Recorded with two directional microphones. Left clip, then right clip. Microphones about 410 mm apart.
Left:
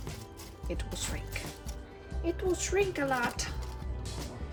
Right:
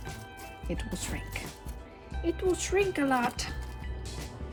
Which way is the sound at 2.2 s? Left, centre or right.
Centre.